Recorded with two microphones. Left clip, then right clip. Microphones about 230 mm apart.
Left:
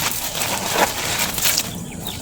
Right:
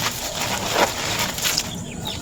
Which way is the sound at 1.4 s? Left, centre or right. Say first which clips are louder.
Left 3 dB; left.